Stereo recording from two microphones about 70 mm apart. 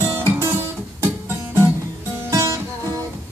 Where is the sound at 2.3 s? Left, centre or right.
Right.